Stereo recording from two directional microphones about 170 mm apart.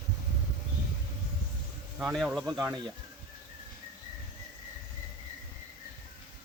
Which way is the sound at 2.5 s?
20° right (ahead or behind).